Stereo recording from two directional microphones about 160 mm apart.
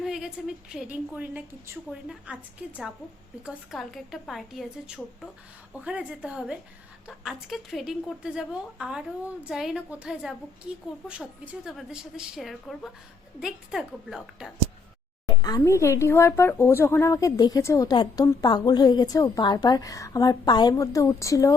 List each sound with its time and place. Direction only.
0.0 s a woman's voice: 5° right (ahead or behind)
15.4 s speech: 25° left (ahead or behind)